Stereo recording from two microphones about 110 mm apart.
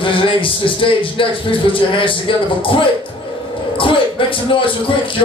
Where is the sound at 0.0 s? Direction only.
50° left (ahead or behind).